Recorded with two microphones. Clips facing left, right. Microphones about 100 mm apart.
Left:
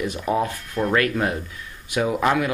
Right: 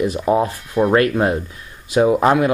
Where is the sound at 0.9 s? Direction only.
30° right (ahead or behind).